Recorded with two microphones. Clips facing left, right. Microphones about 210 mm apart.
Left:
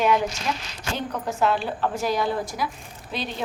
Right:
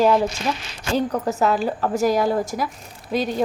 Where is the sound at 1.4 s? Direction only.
40° right (ahead or behind).